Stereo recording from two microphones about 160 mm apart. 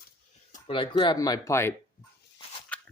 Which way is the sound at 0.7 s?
30° left (ahead or behind).